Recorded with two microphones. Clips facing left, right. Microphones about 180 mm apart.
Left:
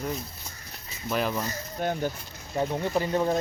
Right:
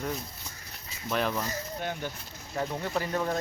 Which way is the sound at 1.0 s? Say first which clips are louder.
Left 2 dB; 5° left (ahead or behind).